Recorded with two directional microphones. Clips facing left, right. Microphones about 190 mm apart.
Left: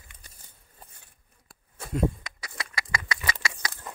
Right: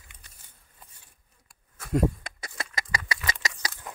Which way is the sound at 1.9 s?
50° right (ahead or behind).